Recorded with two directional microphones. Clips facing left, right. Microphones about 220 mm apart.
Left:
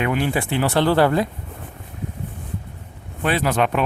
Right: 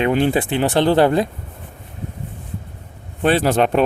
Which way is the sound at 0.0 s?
30° right (ahead or behind).